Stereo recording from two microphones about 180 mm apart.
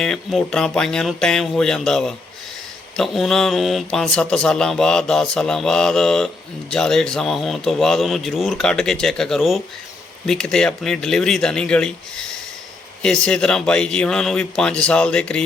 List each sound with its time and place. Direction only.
0.0 s speech: centre (ahead or behind)